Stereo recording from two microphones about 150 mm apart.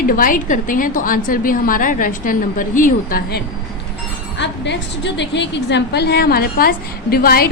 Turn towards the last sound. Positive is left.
turn(degrees=90)